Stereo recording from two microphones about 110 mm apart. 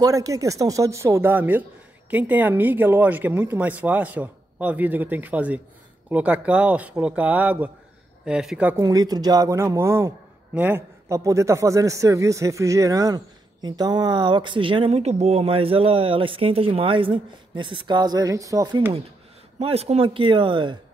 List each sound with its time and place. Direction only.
0.0 s speech: 30° right (ahead or behind); by 8.6 s 5° right (ahead or behind)
8.8 s speech: 35° right (ahead or behind)
10.5 s a man's voice: 15° right (ahead or behind)
11.1 s a man's voice: 30° right (ahead or behind); by 14.9 s 50° right (ahead or behind)
14.9 s speech: 70° right (ahead or behind); by 18.8 s 35° right (ahead or behind)
19.6 s speech: 65° right (ahead or behind); by 20.7 s 50° right (ahead or behind)